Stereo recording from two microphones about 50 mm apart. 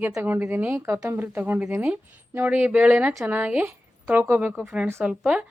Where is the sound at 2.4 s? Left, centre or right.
Right.